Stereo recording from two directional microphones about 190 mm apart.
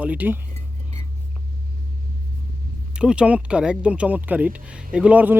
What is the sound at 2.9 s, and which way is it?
Speech, 5° right (ahead or behind).